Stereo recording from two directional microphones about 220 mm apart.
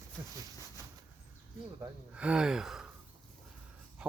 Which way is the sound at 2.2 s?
5° right (ahead or behind).